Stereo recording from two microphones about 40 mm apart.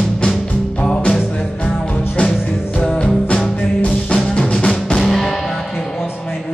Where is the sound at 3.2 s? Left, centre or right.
Left.